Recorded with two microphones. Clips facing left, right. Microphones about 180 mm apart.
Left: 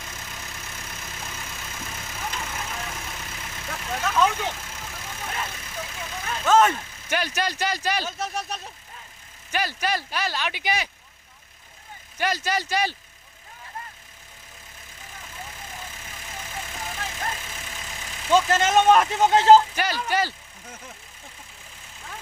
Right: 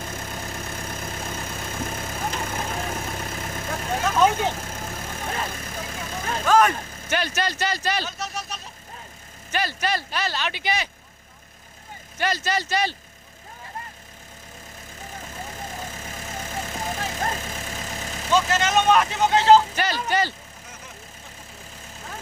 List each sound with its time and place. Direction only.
0.0 s vehicle: 45° right (ahead or behind)
6.5 s speech: 25° left (ahead or behind)
6.7 s vehicle: 45° right (ahead or behind)
7.1 s speech: 10° left (ahead or behind)
8.2 s speech: 55° left (ahead or behind)
9.5 s speech: 10° left (ahead or behind)
12.2 s speech: 10° left (ahead or behind)
15.1 s vehicle: 45° right (ahead or behind)
19.7 s speech: 10° left (ahead or behind)